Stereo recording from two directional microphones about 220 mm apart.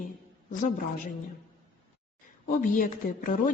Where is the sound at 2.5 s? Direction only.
40° left (ahead or behind).